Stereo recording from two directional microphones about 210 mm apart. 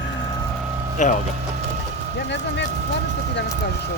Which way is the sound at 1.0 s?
35° left (ahead or behind).